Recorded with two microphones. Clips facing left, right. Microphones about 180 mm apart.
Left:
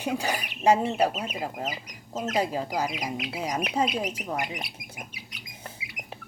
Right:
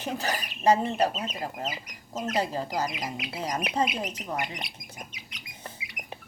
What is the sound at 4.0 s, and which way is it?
Squawk, 10° left (ahead or behind).